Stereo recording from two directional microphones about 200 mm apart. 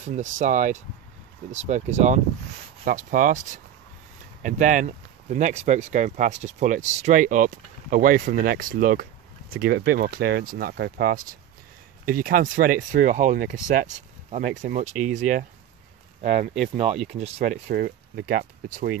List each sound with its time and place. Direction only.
0.0 s speech: 40° right (ahead or behind)
17.6 s speech: 50° right (ahead or behind)